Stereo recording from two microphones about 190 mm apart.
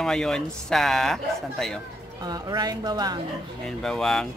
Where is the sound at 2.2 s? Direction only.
20° right (ahead or behind).